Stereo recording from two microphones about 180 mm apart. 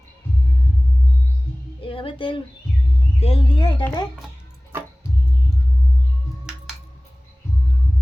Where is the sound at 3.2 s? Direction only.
30° left (ahead or behind).